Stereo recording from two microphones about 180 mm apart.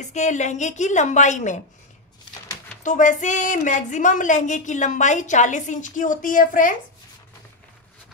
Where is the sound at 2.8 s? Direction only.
45° left (ahead or behind).